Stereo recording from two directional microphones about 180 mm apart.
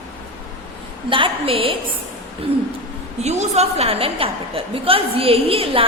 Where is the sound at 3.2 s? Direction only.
35° right (ahead or behind).